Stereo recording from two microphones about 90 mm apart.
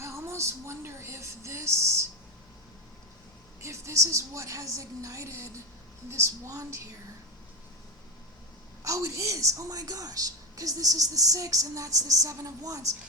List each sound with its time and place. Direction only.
0.0 s a sound: 30° right (ahead or behind)
3.6 s a woman's voice: 35° right (ahead or behind)
8.8 s a woman's voice: 35° right (ahead or behind)